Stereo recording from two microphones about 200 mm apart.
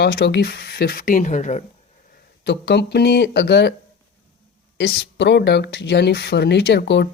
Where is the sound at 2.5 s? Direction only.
55° left (ahead or behind).